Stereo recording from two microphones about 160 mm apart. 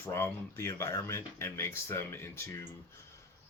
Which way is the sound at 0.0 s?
15° left (ahead or behind).